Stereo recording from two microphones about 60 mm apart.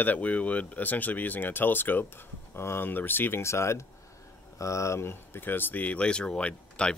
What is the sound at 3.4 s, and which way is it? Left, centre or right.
Speech, left.